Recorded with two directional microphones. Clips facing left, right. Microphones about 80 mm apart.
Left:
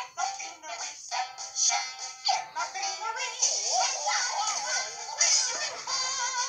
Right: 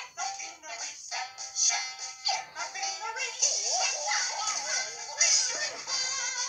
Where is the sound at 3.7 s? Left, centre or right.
Left.